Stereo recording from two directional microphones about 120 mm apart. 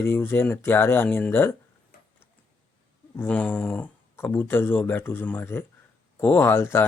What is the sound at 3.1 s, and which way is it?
Speech, 15° left (ahead or behind).